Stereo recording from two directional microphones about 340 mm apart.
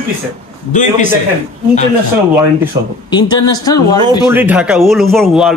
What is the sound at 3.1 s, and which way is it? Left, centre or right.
Speech, centre.